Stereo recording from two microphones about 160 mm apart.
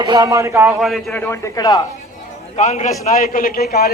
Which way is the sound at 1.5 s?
25° left (ahead or behind).